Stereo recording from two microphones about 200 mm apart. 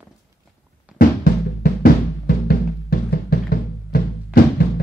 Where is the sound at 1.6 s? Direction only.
45° left (ahead or behind).